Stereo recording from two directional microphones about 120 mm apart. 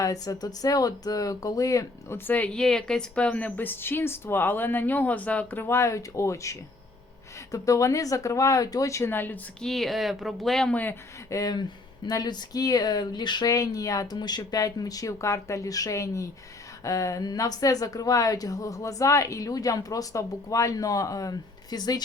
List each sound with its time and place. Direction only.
0.0 s speech: 30° left (ahead or behind); by 9.6 s 15° left (ahead or behind)
9.6 s speech: centre (ahead or behind)
11.3 s speech: 30° left (ahead or behind)